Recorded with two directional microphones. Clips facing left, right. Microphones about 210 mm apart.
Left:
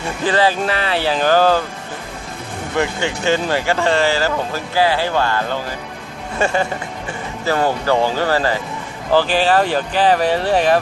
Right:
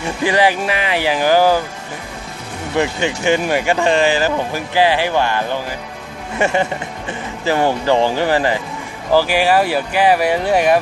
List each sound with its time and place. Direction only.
0.3 s speech: 15° right (ahead or behind)
2.7 s speech: 15° right (ahead or behind)